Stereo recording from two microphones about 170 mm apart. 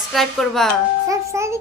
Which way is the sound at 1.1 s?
15° right (ahead or behind).